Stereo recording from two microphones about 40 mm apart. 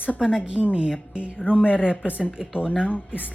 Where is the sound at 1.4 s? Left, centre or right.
Left.